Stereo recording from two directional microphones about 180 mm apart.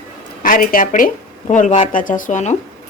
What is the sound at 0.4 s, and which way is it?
A woman's voice, 50° left (ahead or behind).